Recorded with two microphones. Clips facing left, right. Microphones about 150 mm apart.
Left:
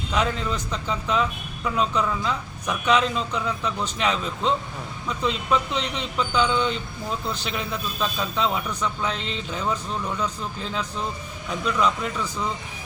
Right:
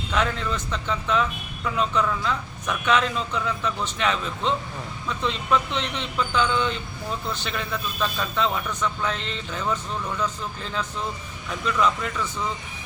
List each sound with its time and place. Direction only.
0.1 s a man's voice: 10° left (ahead or behind)
1.6 s speech: centre (ahead or behind)
2.0 s a man's voice: 10° left (ahead or behind)
2.9 s a man's voice: centre (ahead or behind)
9.0 s speech: centre (ahead or behind)
9.7 s a man's voice: 10° left (ahead or behind)
11.6 s speech: centre (ahead or behind)